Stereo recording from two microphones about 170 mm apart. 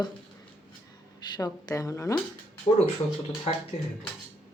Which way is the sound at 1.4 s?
20° left (ahead or behind).